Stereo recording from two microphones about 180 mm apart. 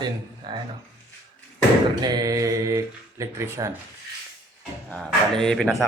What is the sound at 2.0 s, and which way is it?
Speech, 20° right (ahead or behind).